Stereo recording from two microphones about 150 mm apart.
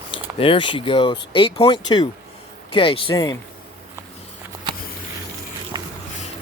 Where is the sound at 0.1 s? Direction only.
35° left (ahead or behind).